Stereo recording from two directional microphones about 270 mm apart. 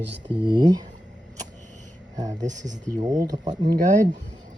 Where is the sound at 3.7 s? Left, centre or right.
Right.